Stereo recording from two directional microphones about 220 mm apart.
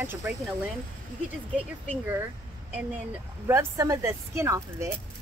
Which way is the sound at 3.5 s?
15° right (ahead or behind).